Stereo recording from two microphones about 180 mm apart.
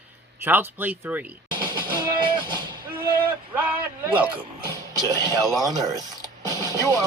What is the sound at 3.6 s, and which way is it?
Speech, 10° right (ahead or behind).